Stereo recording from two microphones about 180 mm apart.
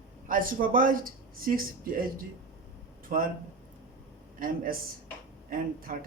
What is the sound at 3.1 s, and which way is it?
Speech, 50° right (ahead or behind).